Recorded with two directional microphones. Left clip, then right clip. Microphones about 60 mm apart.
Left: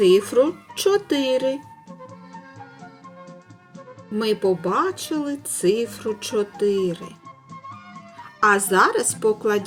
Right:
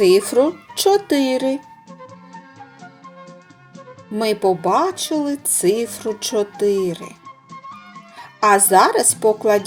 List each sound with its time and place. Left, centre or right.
0.0 s speech: right
1.5 s music: left
4.2 s speech: right
7.3 s music: left
8.4 s speech: right